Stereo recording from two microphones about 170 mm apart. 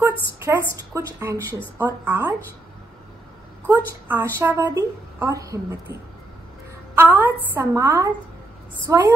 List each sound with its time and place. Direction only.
0.5 s a woman's voice: 20° right (ahead or behind)
3.6 s a woman's voice: 15° right (ahead or behind)
7.0 s a sound: 10° right (ahead or behind)
7.5 s a woman's voice: 15° right (ahead or behind)